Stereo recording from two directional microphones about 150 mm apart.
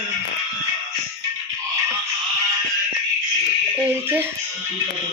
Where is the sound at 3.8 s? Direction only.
15° right (ahead or behind).